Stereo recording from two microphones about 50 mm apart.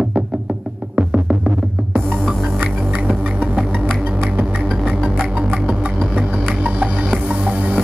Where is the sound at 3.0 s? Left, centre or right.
Right.